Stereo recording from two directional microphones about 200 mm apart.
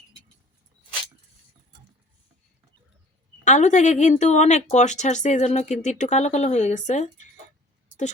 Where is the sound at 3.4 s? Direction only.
35° left (ahead or behind).